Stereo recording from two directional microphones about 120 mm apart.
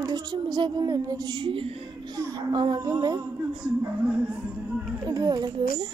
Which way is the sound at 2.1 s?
30° right (ahead or behind).